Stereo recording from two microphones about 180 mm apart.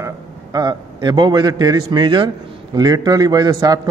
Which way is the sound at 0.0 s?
20° right (ahead or behind).